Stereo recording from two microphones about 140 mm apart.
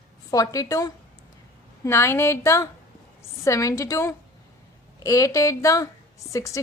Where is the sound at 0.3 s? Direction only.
25° left (ahead or behind).